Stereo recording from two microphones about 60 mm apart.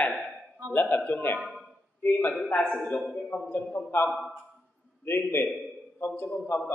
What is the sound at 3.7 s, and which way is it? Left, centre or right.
A man's voice, left.